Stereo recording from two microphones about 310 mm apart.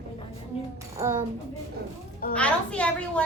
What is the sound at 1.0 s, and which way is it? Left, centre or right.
Speech, centre.